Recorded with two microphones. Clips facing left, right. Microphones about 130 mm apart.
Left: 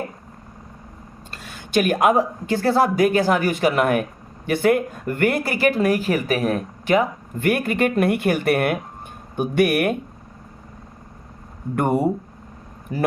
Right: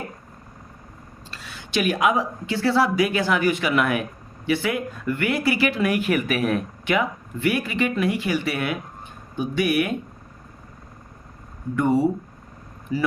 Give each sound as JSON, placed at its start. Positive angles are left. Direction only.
{"t": 1.3, "sound": "speech", "side_deg": 50}
{"t": 11.8, "sound": "speech", "side_deg": 55}